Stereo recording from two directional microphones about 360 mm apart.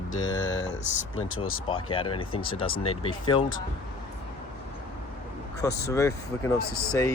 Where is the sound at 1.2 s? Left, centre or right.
Left.